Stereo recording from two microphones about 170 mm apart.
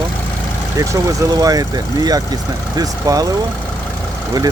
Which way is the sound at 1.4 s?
20° right (ahead or behind).